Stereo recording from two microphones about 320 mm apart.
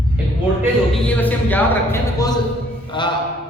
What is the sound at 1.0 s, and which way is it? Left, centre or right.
A man's voice, centre.